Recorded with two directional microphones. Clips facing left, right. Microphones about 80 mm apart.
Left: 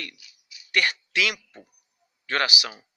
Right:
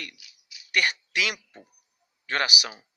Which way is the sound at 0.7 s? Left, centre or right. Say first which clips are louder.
Left 1 dB; centre.